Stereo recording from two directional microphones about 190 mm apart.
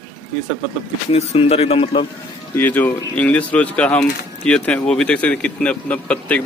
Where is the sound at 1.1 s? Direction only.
30° left (ahead or behind).